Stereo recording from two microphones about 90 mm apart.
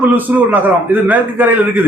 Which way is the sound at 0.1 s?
20° right (ahead or behind).